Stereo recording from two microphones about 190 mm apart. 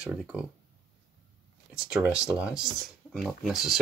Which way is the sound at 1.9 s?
5° right (ahead or behind).